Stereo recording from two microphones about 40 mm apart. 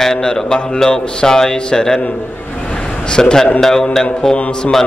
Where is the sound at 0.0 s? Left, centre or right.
Centre.